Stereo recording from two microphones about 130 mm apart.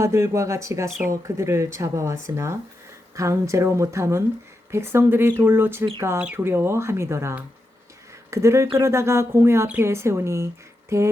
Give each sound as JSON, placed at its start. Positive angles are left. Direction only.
{"t": 0.0, "sound": "speech", "side_deg": -20}